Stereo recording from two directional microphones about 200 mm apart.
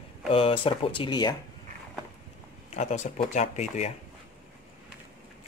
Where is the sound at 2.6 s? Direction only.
35° left (ahead or behind).